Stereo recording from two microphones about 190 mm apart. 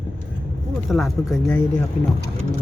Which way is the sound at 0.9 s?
Centre (ahead or behind).